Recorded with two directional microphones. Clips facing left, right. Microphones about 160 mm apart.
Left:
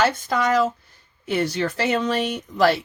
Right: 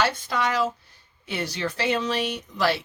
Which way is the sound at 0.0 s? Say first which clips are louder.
Left 4 dB; 45° left (ahead or behind).